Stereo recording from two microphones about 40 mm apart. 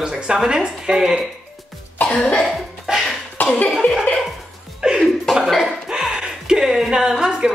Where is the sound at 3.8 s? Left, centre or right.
Left.